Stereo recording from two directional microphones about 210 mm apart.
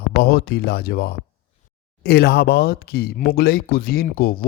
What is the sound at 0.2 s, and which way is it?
Speech, 50° left (ahead or behind).